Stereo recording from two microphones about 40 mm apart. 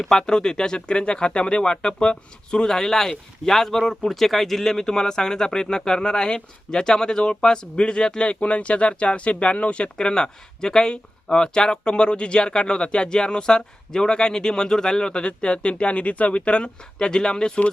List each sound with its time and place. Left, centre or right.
0.0 s speech: centre